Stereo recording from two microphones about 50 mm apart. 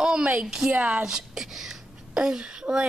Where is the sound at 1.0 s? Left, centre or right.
Centre.